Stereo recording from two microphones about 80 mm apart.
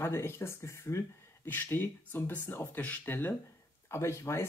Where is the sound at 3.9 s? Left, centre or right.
Left.